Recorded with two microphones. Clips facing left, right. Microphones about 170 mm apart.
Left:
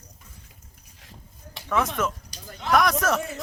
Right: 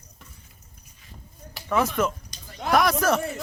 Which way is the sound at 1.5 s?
Centre (ahead or behind).